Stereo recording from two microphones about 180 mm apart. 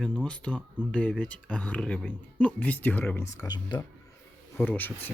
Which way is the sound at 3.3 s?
25° left (ahead or behind).